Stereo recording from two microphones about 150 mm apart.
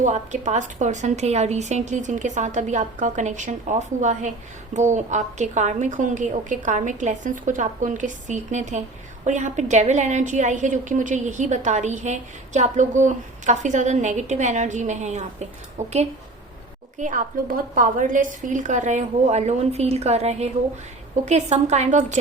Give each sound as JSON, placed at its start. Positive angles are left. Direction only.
{"t": 0.0, "sound": "a woman's voice", "side_deg": -50}
{"t": 17.0, "sound": "a woman's voice", "side_deg": -60}